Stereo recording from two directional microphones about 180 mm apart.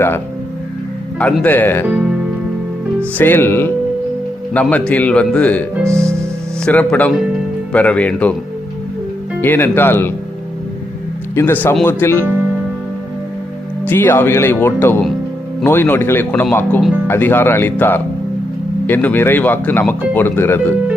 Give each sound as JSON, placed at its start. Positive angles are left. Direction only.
{"t": 1.2, "sound": "speech", "side_deg": 10}
{"t": 1.9, "sound": "speech", "side_deg": -5}
{"t": 3.2, "sound": "speech", "side_deg": 10}
{"t": 5.7, "sound": "speech", "side_deg": -15}
{"t": 6.7, "sound": "speech", "side_deg": 10}
{"t": 9.4, "sound": "speech", "side_deg": 10}
{"t": 11.3, "sound": "speech", "side_deg": 10}
{"t": 13.8, "sound": "speech", "side_deg": 10}